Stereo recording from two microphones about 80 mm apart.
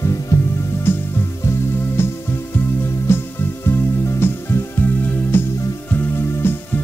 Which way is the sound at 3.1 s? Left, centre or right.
Left.